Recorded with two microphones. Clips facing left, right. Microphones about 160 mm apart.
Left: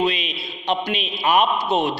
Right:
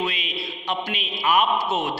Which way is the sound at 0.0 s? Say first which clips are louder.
Left 5 dB; 20° left (ahead or behind).